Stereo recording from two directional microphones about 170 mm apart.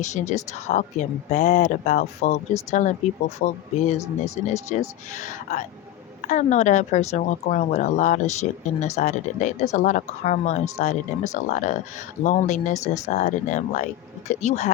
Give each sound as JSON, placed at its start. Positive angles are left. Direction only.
{"t": 0.0, "sound": "speech", "side_deg": 45}
{"t": 12.8, "sound": "speech", "side_deg": 20}
{"t": 13.1, "sound": "speech", "side_deg": 45}